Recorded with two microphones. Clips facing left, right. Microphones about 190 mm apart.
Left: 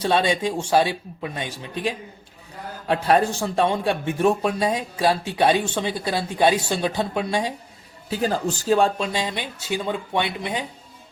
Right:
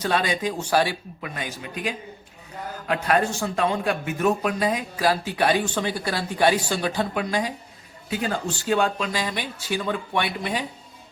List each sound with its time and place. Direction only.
0.0 s speech: 25° left (ahead or behind)